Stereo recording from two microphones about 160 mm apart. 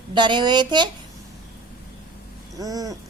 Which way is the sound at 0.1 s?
30° right (ahead or behind).